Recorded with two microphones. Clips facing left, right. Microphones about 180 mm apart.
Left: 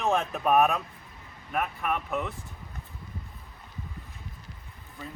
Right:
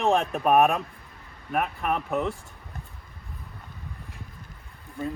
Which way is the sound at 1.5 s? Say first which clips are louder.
Right 3 dB; 35° right (ahead or behind).